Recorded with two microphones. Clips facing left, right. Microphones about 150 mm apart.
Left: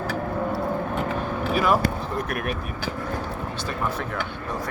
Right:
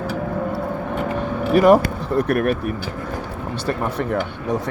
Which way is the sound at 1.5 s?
70° right (ahead or behind).